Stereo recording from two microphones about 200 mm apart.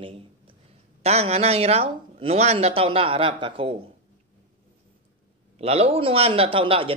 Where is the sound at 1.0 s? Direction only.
30° right (ahead or behind).